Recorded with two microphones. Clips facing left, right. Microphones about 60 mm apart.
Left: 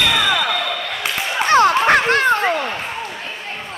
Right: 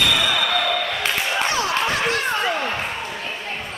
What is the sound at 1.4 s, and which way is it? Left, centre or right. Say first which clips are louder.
Dog: left 14 dB; left.